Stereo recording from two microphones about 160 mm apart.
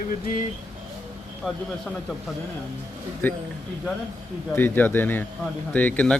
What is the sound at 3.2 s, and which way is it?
Speech, 10° left (ahead or behind).